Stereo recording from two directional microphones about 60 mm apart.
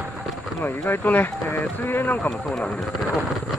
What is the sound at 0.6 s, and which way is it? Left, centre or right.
Speech, left.